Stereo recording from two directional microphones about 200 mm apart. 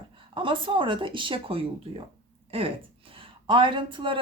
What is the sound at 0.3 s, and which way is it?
Speech, 25° right (ahead or behind).